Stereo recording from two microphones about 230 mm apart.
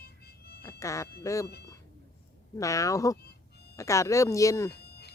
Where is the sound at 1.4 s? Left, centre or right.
Left.